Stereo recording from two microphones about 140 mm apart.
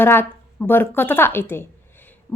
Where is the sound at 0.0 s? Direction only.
15° left (ahead or behind).